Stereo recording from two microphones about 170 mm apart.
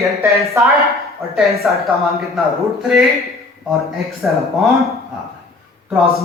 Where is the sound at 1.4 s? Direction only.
Centre (ahead or behind).